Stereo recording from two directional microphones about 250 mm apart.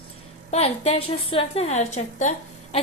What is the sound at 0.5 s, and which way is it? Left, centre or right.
A woman's voice, left.